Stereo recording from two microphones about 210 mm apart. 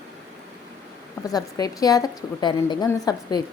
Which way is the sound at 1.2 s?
15° left (ahead or behind).